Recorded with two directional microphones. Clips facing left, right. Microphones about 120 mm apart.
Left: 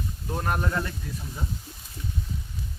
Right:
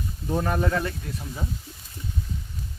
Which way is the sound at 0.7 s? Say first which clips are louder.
Right 3 dB; 90° right.